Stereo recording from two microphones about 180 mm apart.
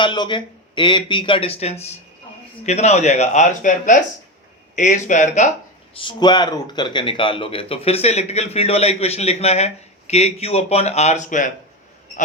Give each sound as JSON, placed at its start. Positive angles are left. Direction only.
{"t": 0.0, "sound": "speech", "side_deg": 25}
{"t": 6.0, "sound": "speech", "side_deg": 25}